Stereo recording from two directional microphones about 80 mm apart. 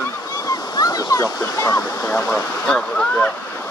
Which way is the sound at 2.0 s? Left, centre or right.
Left.